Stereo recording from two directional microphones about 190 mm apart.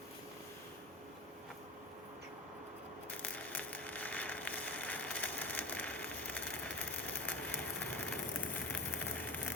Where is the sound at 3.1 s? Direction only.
10° left (ahead or behind).